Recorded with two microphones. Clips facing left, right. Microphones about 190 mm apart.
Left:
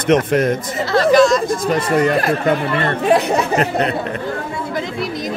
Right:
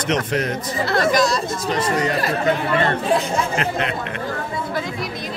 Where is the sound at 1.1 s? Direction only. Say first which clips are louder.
Left 7 dB; 35° right (ahead or behind).